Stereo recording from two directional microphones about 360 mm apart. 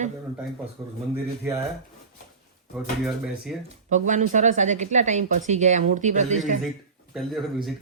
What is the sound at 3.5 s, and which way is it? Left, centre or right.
Speech, centre.